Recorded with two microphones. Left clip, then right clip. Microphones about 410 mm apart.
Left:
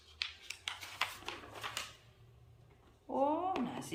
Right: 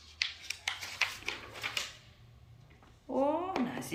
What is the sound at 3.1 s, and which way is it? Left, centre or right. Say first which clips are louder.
Speech: right 2 dB; centre.